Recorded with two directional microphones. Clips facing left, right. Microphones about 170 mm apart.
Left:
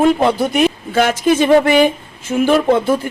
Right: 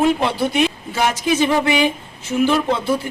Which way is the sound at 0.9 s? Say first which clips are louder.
Left 4 dB; 55° left (ahead or behind).